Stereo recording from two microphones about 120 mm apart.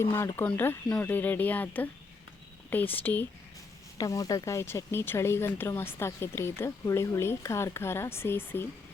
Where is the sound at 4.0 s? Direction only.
30° left (ahead or behind).